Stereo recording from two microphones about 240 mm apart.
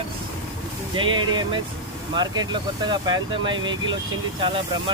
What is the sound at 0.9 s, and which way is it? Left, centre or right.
Speech, centre.